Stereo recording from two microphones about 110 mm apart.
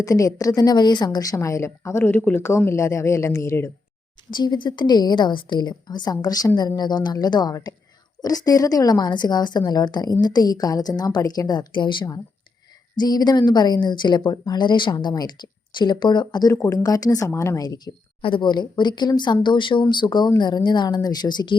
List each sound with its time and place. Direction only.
0.0 s a woman's voice: 30° left (ahead or behind)
4.3 s a woman's voice: 45° left (ahead or behind)
18.2 s a woman's voice: 50° left (ahead or behind)